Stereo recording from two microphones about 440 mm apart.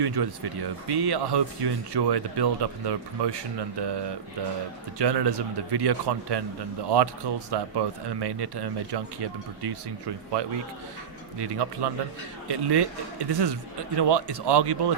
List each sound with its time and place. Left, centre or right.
0.0 s speech: right
11.3 s speech: right